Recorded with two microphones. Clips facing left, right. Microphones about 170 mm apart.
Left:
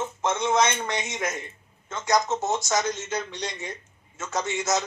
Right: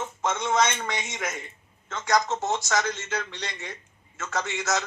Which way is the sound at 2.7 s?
10° left (ahead or behind).